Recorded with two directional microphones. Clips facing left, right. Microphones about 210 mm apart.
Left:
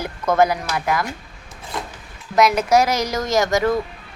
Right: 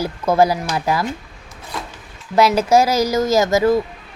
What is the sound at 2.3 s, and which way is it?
Speech, 30° right (ahead or behind).